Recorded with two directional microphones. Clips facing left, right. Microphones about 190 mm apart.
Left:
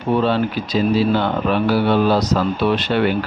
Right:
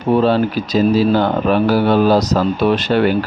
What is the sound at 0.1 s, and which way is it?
Speech, 40° right (ahead or behind).